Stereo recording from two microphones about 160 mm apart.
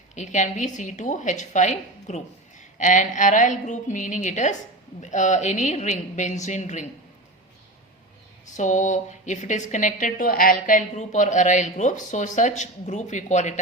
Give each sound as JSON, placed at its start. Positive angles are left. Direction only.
{"t": 0.1, "sound": "a woman's voice", "side_deg": 50}
{"t": 8.5, "sound": "a woman's voice", "side_deg": 50}